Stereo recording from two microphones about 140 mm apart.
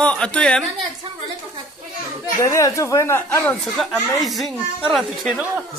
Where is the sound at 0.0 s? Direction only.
10° left (ahead or behind).